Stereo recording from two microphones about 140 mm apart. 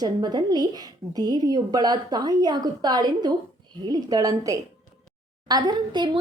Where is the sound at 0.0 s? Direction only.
30° right (ahead or behind).